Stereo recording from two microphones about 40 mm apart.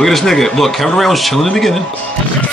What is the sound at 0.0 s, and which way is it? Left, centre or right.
Speech, centre.